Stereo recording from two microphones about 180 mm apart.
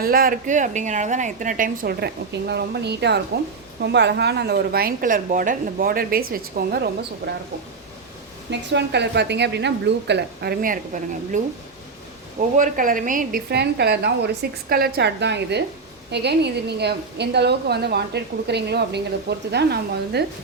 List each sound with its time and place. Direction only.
0.0 s a woman's voice: 55° right (ahead or behind)
8.4 s a woman's voice: 70° right (ahead or behind); by 11.3 s 45° right (ahead or behind)
12.5 s a woman's voice: 45° right (ahead or behind); by 20.2 s 65° right (ahead or behind)